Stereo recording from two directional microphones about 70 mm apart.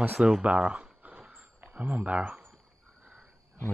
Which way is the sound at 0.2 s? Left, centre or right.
Centre.